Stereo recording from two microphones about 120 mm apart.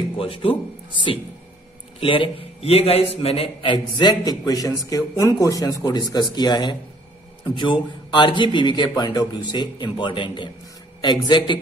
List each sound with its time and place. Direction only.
0.1 s a man's voice: 50° left (ahead or behind)
3.7 s a man's voice: 40° left (ahead or behind)